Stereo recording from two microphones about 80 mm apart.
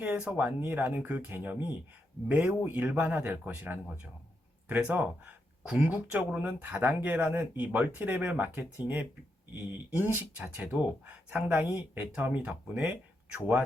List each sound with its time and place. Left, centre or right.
0.0 s speech: centre
4.9 s speech: centre
5.6 s speech: centre
10.2 s speech: centre
11.6 s speech: right